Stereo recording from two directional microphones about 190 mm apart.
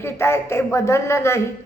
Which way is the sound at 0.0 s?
15° left (ahead or behind).